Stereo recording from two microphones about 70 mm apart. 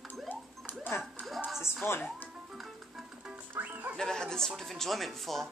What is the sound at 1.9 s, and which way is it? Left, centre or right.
Speech, left.